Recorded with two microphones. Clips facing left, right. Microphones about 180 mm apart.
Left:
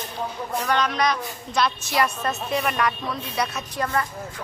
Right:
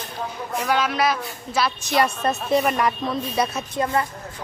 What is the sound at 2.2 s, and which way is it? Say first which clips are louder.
Speech: right 5 dB; 35° right (ahead or behind).